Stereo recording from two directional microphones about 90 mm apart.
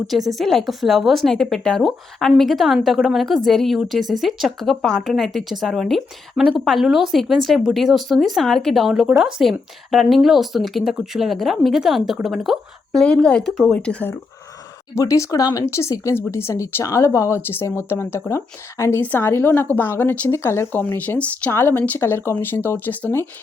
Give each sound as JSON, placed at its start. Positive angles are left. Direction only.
{"t": 0.3, "sound": "a woman's voice", "side_deg": 5}
{"t": 13.7, "sound": "speech", "side_deg": 15}
{"t": 14.9, "sound": "speech", "side_deg": 35}
{"t": 15.6, "sound": "speech", "side_deg": 30}
{"t": 18.9, "sound": "speech", "side_deg": 20}